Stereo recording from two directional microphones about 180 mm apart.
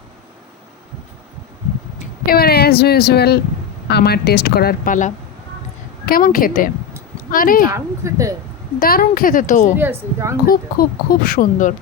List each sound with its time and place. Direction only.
2.2 s speech: 60° left (ahead or behind)
7.7 s speech: 15° right (ahead or behind)
8.8 s speech: 50° left (ahead or behind)
9.7 s speech: 10° right (ahead or behind)
10.4 s speech: 55° left (ahead or behind)